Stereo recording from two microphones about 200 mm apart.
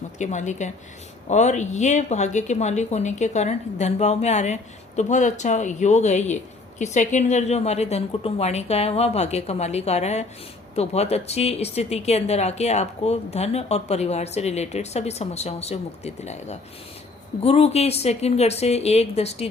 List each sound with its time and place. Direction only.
0.2 s speech: 35° left (ahead or behind)